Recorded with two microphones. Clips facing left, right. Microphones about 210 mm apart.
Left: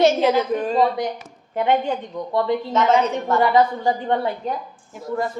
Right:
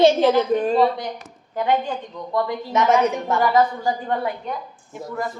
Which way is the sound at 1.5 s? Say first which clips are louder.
Left 2 dB; 25° left (ahead or behind).